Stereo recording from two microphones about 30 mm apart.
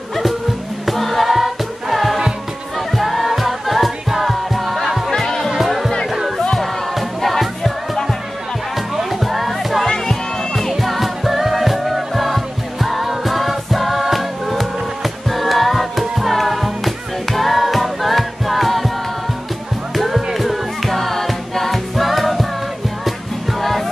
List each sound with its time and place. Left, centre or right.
0.8 s choir: centre
1.3 s music: centre
4.8 s music: centre
5.1 s music: centre
5.6 s music: centre
20.3 s music: centre
23.6 s music: centre